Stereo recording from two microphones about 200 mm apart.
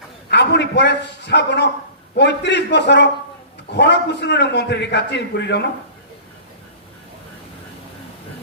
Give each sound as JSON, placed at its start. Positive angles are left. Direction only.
{"t": 0.3, "sound": "a man's voice", "side_deg": 60}